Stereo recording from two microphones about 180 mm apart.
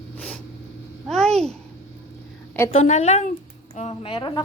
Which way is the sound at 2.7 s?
35° left (ahead or behind).